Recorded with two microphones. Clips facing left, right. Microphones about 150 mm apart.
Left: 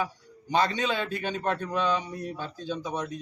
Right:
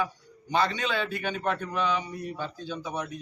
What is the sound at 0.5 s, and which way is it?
Speech, 15° left (ahead or behind).